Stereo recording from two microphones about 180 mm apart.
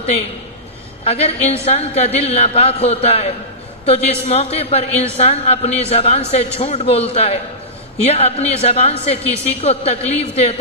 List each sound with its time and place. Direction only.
1.0 s a man's voice: 35° left (ahead or behind)